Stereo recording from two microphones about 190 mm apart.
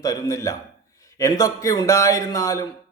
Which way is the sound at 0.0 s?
20° left (ahead or behind).